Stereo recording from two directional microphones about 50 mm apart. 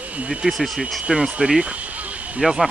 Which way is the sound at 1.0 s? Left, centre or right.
Right.